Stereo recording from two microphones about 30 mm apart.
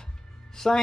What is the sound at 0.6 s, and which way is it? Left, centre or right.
Music, centre.